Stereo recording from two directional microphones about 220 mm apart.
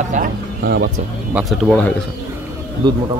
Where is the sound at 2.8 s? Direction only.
20° right (ahead or behind).